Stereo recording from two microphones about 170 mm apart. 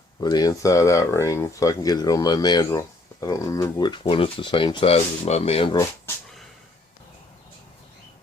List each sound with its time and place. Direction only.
0.2 s speech: 25° left (ahead or behind)